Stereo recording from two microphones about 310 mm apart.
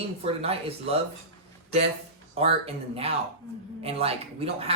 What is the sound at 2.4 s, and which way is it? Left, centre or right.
Speech, centre.